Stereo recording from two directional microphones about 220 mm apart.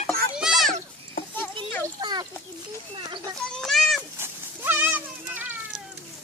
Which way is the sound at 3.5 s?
Centre (ahead or behind).